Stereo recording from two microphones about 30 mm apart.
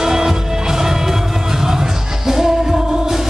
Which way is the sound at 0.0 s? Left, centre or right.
Centre.